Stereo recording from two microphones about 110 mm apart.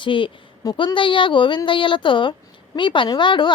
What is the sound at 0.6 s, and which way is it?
A woman's voice, 35° left (ahead or behind).